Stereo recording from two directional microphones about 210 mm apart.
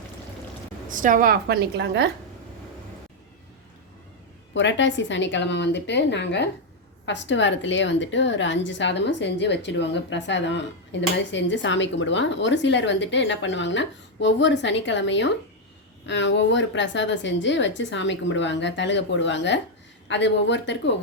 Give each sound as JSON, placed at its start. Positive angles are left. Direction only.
{"t": 0.9, "sound": "a woman's voice", "side_deg": -40}
{"t": 4.5, "sound": "a woman's voice", "side_deg": 60}